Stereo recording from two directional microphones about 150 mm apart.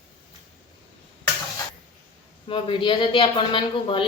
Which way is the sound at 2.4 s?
35° left (ahead or behind).